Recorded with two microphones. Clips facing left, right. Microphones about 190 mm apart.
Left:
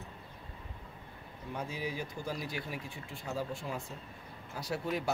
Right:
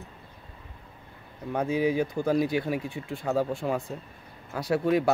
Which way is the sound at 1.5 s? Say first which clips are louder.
Right 13 dB; 60° right (ahead or behind).